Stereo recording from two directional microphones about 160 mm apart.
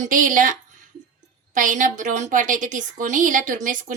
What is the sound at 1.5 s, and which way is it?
A woman's voice, 55° right (ahead or behind).